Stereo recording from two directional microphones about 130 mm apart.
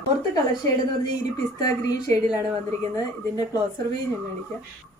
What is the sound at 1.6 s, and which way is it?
A woman's voice, 30° left (ahead or behind).